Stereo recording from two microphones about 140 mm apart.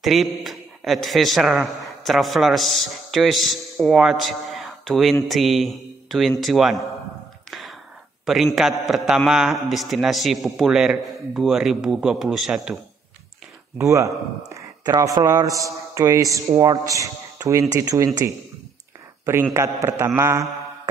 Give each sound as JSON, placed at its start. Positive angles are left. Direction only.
{"t": 0.0, "sound": "a man's voice", "side_deg": 0}
{"t": 8.5, "sound": "a man's voice", "side_deg": 0}
{"t": 13.7, "sound": "speech", "side_deg": -20}
{"t": 19.5, "sound": "speech", "side_deg": -20}